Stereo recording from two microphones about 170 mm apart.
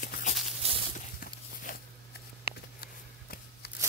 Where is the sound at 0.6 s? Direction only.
35° right (ahead or behind).